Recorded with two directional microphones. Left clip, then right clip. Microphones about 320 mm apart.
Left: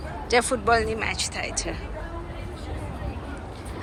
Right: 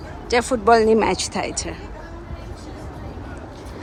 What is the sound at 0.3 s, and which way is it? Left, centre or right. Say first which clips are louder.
Speech: right 5 dB; centre.